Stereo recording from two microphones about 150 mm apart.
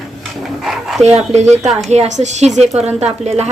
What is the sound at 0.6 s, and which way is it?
Speech, 5° right (ahead or behind).